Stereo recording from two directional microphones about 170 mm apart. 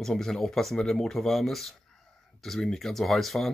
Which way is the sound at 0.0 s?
5° left (ahead or behind).